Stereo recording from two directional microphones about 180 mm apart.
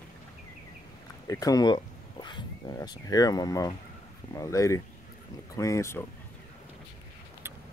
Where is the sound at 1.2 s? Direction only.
20° left (ahead or behind).